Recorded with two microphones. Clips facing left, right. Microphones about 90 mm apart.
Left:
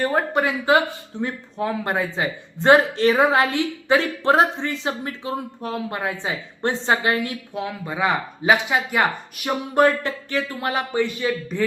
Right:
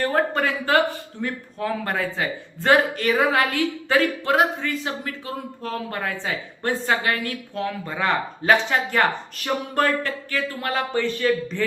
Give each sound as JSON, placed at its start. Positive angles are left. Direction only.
{"t": 0.0, "sound": "speech", "side_deg": 15}